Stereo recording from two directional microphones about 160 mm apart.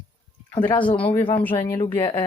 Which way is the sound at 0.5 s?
10° left (ahead or behind).